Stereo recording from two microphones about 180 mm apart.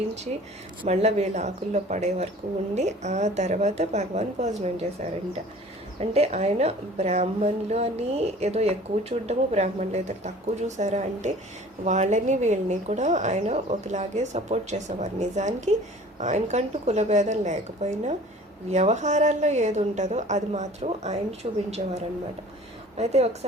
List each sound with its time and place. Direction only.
0.8 s a woman's voice: 35° right (ahead or behind)
6.0 s a woman's voice: 35° right (ahead or behind)
23.0 s a woman's voice: 35° right (ahead or behind)